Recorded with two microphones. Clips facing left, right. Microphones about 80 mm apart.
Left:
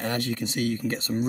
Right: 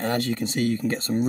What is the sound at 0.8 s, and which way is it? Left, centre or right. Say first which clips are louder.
Speech: right 3 dB; right.